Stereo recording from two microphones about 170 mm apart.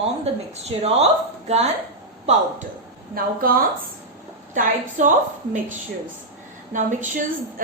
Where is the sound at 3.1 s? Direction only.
60° right (ahead or behind).